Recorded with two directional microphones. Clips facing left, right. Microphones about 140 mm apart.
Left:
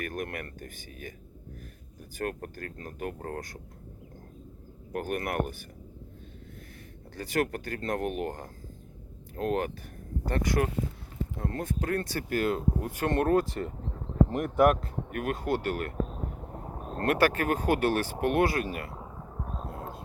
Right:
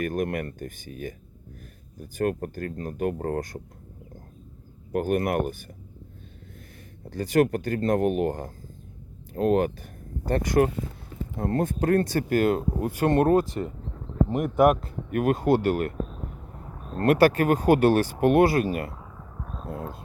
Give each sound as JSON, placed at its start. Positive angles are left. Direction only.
{"t": 0.0, "sound": "speech", "side_deg": -25}
{"t": 2.1, "sound": "speech", "side_deg": -30}
{"t": 4.9, "sound": "speech", "side_deg": -25}
{"t": 7.3, "sound": "speech", "side_deg": -25}
{"t": 10.2, "sound": "speech", "side_deg": -40}
{"t": 14.3, "sound": "speech", "side_deg": -10}
{"t": 15.1, "sound": "speech", "side_deg": -30}
{"t": 16.5, "sound": "a sound", "side_deg": 35}
{"t": 17.1, "sound": "speech", "side_deg": -35}
{"t": 18.9, "sound": "a sound", "side_deg": 25}